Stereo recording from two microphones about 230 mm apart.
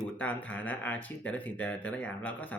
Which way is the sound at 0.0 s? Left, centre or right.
Centre.